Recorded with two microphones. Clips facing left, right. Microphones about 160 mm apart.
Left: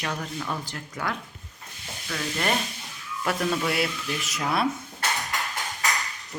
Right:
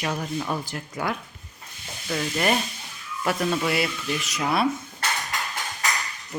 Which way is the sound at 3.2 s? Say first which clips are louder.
Right 2 dB; 5° right (ahead or behind).